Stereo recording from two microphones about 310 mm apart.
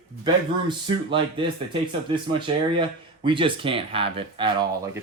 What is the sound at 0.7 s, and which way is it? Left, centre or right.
Speech, centre.